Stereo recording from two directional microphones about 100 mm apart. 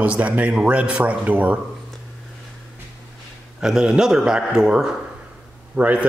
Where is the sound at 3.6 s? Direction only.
5° right (ahead or behind).